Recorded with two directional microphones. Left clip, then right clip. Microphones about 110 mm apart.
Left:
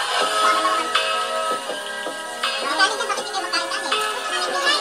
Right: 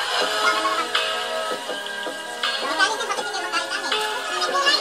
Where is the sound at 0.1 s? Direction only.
30° left (ahead or behind).